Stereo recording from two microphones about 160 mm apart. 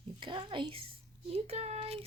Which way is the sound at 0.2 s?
30° right (ahead or behind).